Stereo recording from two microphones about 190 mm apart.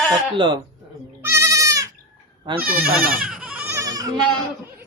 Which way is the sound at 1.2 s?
15° right (ahead or behind).